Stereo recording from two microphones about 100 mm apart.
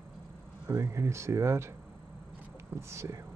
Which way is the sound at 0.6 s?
30° right (ahead or behind).